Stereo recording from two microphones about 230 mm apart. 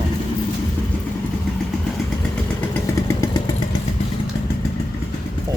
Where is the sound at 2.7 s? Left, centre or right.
Centre.